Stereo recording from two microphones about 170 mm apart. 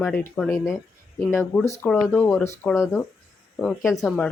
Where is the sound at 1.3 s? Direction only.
15° left (ahead or behind).